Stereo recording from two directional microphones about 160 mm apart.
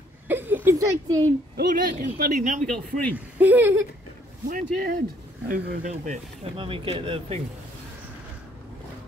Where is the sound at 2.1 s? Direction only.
60° right (ahead or behind).